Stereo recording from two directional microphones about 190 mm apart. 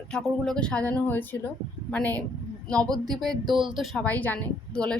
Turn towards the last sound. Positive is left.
turn(degrees=5)  # may be behind; listen again after turning